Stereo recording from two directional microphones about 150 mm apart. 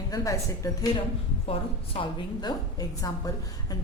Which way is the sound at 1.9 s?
30° left (ahead or behind).